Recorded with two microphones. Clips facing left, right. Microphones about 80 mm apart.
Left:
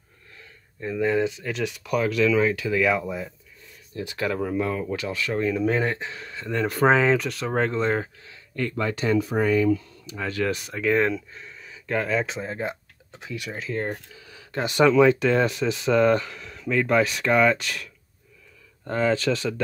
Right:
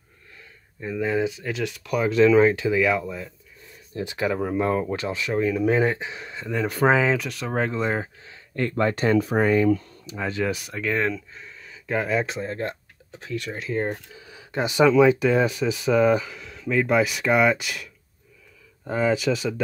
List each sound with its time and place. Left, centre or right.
0.7 s speech: centre
2.0 s speech: right
2.8 s speech: centre
3.9 s speech: right
4.2 s speech: centre
4.6 s speech: right
5.3 s speech: centre
8.2 s speech: right
10.0 s speech: right; by 11.8 s centre
11.8 s speech: centre
12.4 s speech: centre
13.7 s speech: centre